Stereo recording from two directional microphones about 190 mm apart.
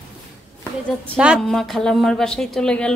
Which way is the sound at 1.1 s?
5° right (ahead or behind).